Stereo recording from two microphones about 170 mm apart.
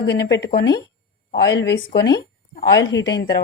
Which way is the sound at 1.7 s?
75° left (ahead or behind).